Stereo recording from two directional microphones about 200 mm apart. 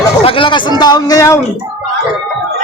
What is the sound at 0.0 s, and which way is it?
Speech, 25° left (ahead or behind).